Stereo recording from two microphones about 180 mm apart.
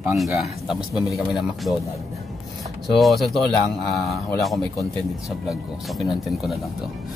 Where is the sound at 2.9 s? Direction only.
Centre (ahead or behind).